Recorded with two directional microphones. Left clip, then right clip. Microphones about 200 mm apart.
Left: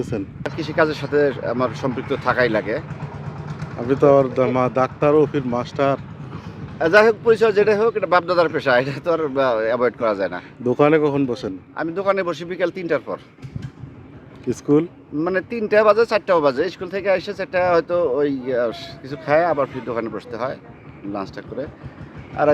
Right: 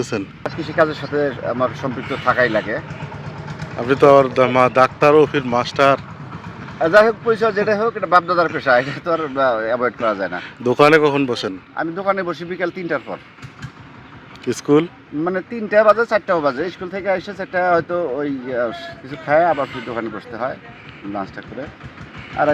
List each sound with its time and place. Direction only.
0.0 s speech: centre (ahead or behind)
0.6 s speech: 25° left (ahead or behind)
3.4 s vehicle: 35° right (ahead or behind)
3.8 s speech: centre (ahead or behind)
6.7 s speech: 25° left (ahead or behind)
10.6 s speech: centre (ahead or behind)
11.8 s speech: 25° left (ahead or behind)
14.4 s speech: centre (ahead or behind)
15.2 s speech: 25° left (ahead or behind)